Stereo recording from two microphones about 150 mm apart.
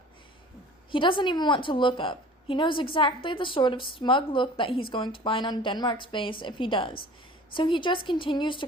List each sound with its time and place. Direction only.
0.9 s a woman's voice: 35° left (ahead or behind)